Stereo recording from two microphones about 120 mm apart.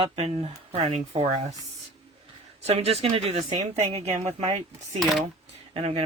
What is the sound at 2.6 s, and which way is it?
Speech, 60° right (ahead or behind).